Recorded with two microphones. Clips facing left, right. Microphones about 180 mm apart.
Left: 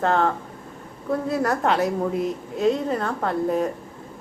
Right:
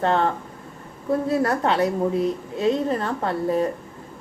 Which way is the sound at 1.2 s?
Centre (ahead or behind).